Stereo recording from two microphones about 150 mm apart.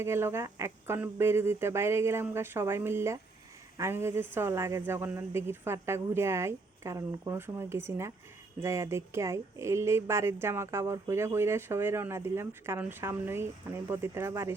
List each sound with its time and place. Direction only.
0.0 s speech: 15° right (ahead or behind)